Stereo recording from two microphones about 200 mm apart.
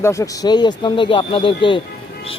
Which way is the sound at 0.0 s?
15° left (ahead or behind).